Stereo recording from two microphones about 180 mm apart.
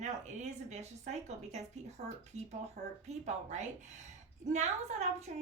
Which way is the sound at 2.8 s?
55° right (ahead or behind).